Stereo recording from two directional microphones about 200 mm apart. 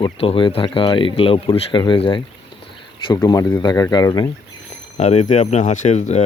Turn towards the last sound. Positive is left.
turn(degrees=35)  # may be behind; listen again after turning